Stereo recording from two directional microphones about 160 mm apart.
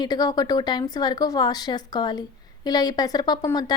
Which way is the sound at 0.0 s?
25° left (ahead or behind).